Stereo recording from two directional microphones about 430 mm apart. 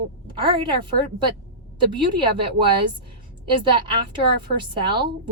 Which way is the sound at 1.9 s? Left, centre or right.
Centre.